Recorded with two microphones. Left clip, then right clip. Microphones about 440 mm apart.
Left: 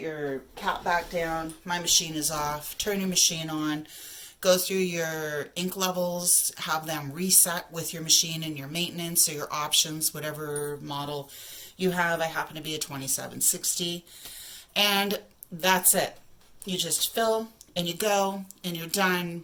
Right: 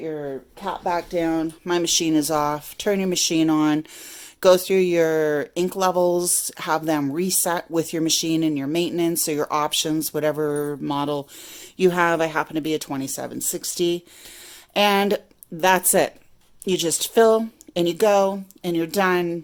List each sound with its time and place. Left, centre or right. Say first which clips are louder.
0.6 s speech: right 2 dB; centre